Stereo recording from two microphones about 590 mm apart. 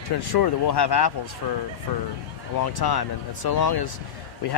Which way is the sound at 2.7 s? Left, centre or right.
Left.